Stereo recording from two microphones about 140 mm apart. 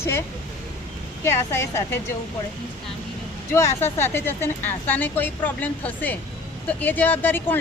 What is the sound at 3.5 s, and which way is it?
Speech, 20° left (ahead or behind).